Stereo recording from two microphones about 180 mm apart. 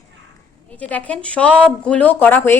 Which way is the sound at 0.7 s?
10° left (ahead or behind).